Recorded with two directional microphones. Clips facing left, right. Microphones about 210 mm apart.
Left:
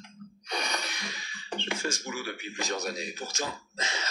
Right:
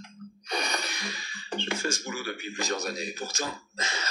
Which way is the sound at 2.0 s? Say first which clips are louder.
Right 1 dB; centre (ahead or behind).